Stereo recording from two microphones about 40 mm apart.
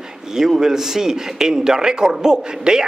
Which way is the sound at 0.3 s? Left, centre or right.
Centre.